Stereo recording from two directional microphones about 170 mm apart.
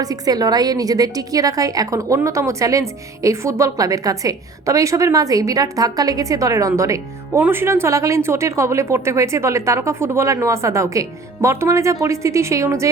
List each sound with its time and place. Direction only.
0.0 s a woman's voice: 20° right (ahead or behind)